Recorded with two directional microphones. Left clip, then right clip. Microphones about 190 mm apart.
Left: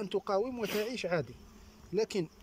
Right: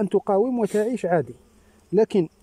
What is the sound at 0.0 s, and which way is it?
Speech, 45° right (ahead or behind).